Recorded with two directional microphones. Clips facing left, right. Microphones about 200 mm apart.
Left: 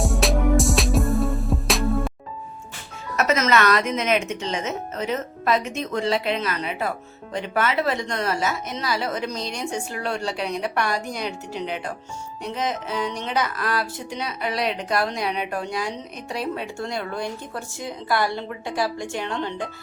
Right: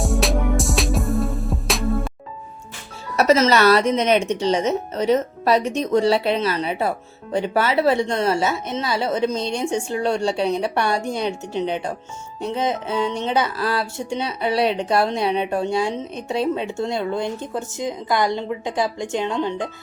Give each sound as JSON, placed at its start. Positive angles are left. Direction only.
{"t": 0.0, "sound": "music", "side_deg": 0}
{"t": 3.2, "sound": "speech", "side_deg": -30}